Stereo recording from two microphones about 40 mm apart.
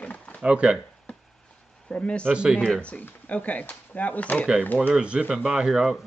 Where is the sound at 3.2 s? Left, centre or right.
Left.